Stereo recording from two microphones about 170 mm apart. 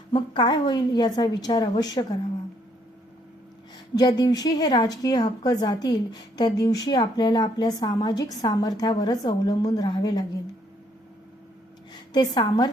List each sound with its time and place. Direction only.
0.1 s a woman's voice: 30° left (ahead or behind)
3.9 s a woman's voice: 25° left (ahead or behind)
12.1 s a woman's voice: 25° left (ahead or behind)